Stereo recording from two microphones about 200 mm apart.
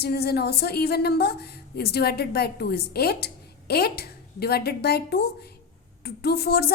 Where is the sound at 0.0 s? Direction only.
50° left (ahead or behind).